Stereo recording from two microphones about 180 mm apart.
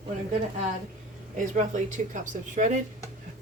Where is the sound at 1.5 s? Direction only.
40° right (ahead or behind).